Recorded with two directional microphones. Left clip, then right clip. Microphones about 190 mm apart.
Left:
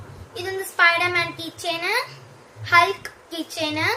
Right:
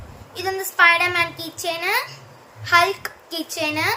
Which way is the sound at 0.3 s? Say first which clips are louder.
Right 3 dB; 45° right (ahead or behind).